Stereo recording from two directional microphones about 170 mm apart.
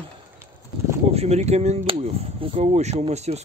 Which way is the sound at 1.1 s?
40° right (ahead or behind).